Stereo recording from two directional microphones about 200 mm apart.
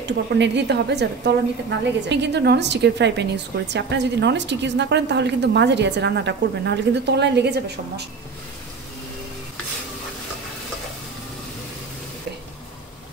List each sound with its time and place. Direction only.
0.4 s a woman's voice: 55° right (ahead or behind)